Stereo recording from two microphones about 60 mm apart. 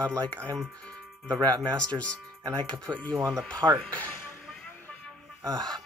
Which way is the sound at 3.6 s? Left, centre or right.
Right.